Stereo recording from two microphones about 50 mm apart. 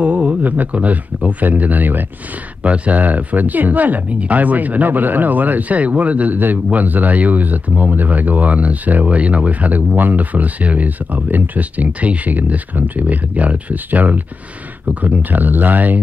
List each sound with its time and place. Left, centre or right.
0.0 s speech: right
2.6 s speech: right